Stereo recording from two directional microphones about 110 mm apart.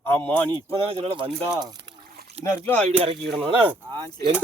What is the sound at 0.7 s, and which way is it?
Speech, 60° right (ahead or behind).